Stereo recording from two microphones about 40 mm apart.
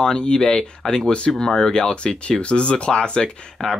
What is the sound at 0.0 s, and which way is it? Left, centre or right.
Speech, centre.